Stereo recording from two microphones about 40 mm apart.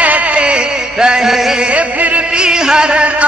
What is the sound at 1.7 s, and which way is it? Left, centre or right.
Music, right.